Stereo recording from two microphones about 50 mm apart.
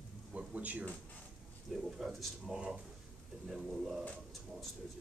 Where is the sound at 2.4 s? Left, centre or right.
Centre.